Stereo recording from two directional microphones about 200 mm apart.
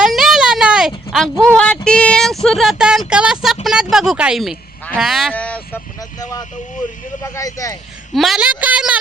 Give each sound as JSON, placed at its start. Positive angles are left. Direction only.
{"t": 0.0, "sound": "a sound", "side_deg": 0}
{"t": 1.1, "sound": "speech", "side_deg": 5}
{"t": 8.1, "sound": "speech", "side_deg": 0}